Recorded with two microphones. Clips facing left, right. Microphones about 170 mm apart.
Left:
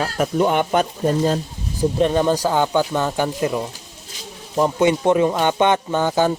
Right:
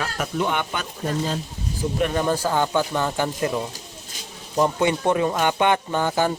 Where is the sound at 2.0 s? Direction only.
20° left (ahead or behind).